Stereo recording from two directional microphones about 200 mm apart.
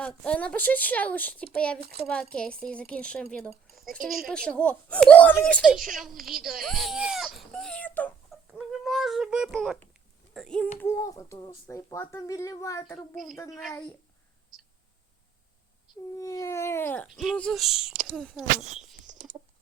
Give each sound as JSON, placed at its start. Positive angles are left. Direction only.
{"t": 0.0, "sound": "a child's voice", "side_deg": 5}
{"t": 3.7, "sound": "a sound", "side_deg": 0}
{"t": 4.0, "sound": "a child's voice", "side_deg": 0}
{"t": 11.0, "sound": "speech", "side_deg": 15}
{"t": 16.1, "sound": "a child's voice", "side_deg": 15}